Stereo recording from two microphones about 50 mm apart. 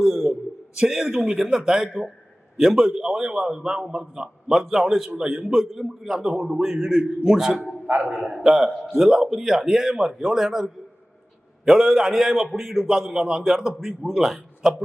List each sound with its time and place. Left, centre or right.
0.0 s a sound: centre
0.8 s a man's voice: centre
7.9 s a man's voice: right
8.3 s a man's voice: centre